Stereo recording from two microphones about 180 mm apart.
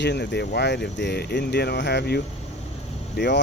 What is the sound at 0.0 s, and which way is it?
Speech, 70° left (ahead or behind).